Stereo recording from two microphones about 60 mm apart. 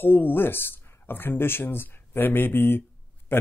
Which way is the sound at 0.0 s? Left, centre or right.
Left.